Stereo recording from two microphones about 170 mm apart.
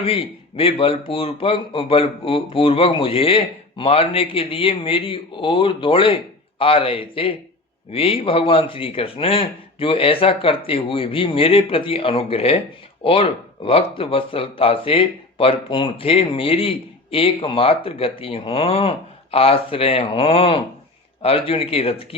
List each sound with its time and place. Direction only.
0.0 s speech: 35° left (ahead or behind)